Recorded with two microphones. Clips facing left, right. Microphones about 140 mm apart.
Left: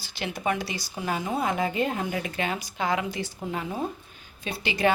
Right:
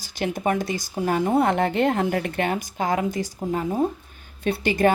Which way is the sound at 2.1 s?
55° right (ahead or behind).